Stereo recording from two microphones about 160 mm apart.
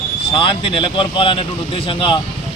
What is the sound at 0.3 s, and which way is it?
Speech, 35° left (ahead or behind).